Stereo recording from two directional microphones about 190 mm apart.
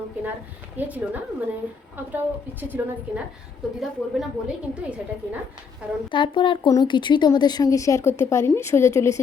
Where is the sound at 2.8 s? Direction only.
10° right (ahead or behind).